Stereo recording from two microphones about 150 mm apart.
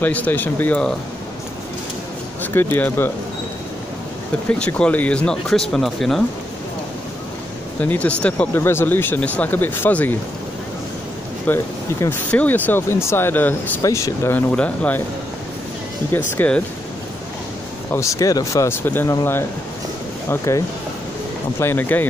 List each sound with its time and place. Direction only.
0.0 s speech: 10° left (ahead or behind)
2.4 s speech: 10° left (ahead or behind)
4.5 s speech: 5° left (ahead or behind)
7.8 s speech: 10° left (ahead or behind)
11.4 s speech: 15° left (ahead or behind)
14.5 s speech: 10° left (ahead or behind)
16.3 s speech: 10° left (ahead or behind)
17.9 s speech: 20° left (ahead or behind)
20.2 s speech: 20° left (ahead or behind)